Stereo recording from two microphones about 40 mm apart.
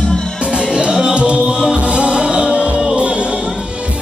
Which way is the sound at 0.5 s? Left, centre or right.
Right.